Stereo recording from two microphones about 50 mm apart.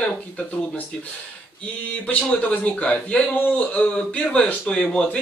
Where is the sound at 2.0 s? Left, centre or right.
Left.